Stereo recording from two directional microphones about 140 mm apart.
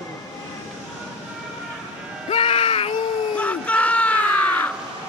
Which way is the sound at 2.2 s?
45° left (ahead or behind).